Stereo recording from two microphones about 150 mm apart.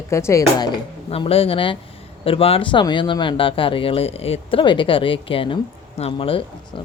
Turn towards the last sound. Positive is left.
turn(degrees=35)  # may be behind; listen again after turning